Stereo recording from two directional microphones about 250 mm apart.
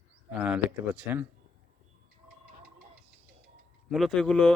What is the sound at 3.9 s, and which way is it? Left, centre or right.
Speech, centre.